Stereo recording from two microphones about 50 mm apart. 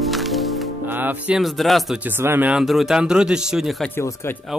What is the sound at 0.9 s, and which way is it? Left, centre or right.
Music, right.